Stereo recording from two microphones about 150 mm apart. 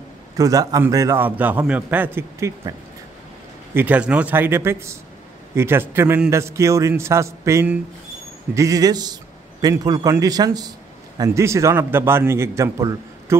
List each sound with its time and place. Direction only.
0.4 s a man's voice: 25° right (ahead or behind)
3.7 s a man's voice: 10° right (ahead or behind)